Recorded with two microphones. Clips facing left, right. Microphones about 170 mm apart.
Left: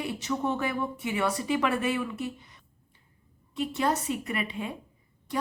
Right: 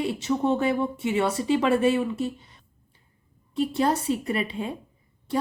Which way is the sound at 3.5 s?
35° right (ahead or behind).